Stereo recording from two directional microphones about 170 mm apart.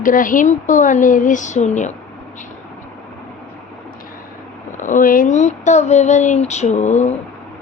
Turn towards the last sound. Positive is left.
turn(degrees=45)  # may be behind; listen again after turning